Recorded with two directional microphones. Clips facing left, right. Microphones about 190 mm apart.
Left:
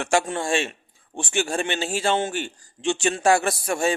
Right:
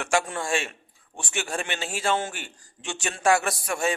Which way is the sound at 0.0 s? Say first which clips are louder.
Left 3 dB; 30° left (ahead or behind).